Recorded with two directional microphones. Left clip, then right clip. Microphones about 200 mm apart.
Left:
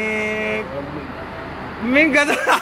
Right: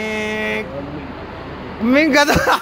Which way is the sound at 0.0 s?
20° right (ahead or behind).